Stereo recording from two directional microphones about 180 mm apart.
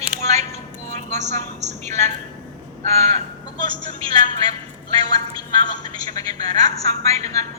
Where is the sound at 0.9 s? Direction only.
40° right (ahead or behind).